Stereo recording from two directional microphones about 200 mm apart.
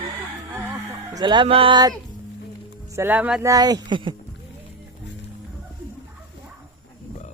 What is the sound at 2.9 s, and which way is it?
Speech, 10° right (ahead or behind).